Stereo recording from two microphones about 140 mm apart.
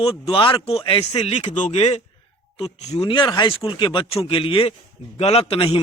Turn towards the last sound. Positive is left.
turn(degrees=40)  # may be behind; listen again after turning